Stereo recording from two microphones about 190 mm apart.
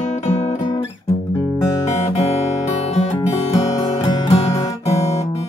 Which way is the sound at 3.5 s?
35° left (ahead or behind).